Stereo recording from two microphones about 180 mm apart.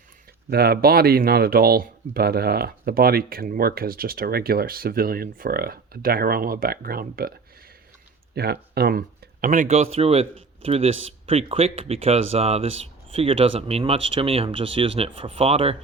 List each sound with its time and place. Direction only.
0.5 s speech: 60° right (ahead or behind)
8.4 s speech: 60° right (ahead or behind); by 15.7 s 35° right (ahead or behind)